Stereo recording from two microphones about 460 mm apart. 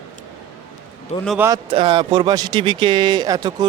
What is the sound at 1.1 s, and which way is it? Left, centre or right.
A man's voice, centre.